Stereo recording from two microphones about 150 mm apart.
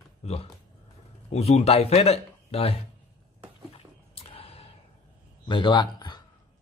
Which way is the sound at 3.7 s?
40° left (ahead or behind).